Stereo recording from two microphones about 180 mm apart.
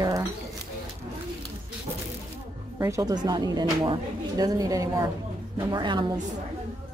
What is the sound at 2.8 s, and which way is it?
Speech, 15° right (ahead or behind).